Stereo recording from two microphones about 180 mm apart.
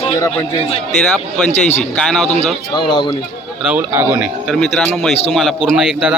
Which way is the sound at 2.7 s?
30° left (ahead or behind).